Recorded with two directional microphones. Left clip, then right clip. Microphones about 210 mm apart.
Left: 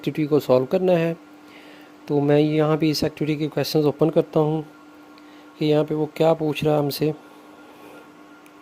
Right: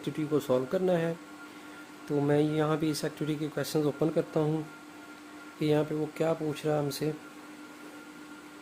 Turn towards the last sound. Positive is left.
turn(degrees=40)  # may be behind; listen again after turning